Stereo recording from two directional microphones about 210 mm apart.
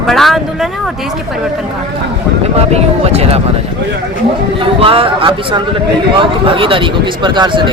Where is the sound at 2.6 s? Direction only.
30° right (ahead or behind).